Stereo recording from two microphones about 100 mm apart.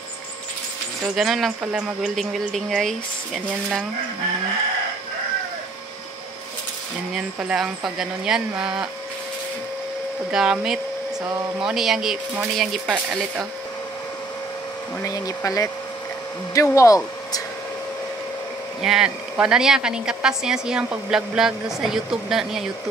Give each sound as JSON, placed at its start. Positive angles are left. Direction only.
{"t": 1.1, "sound": "a woman's voice", "side_deg": 0}
{"t": 7.2, "sound": "a woman's voice", "side_deg": -5}
{"t": 10.3, "sound": "a woman's voice", "side_deg": -5}
{"t": 15.0, "sound": "speech", "side_deg": 35}
{"t": 18.8, "sound": "a woman's voice", "side_deg": -5}